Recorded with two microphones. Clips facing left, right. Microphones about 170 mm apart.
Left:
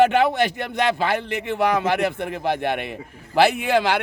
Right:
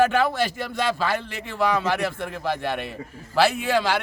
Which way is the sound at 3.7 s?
60° left (ahead or behind).